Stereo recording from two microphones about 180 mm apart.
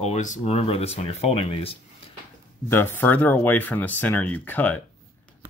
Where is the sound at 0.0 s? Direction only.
40° left (ahead or behind).